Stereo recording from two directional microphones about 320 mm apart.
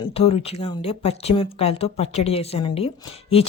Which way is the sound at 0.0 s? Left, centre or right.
Centre.